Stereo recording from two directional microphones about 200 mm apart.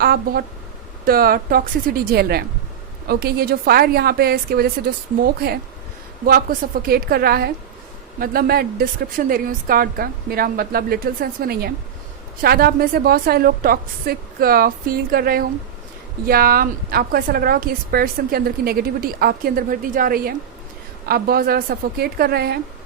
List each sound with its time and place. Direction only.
0.0 s a woman's voice: 50° right (ahead or behind)